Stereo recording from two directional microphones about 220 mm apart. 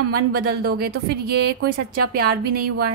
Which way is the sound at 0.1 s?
45° right (ahead or behind).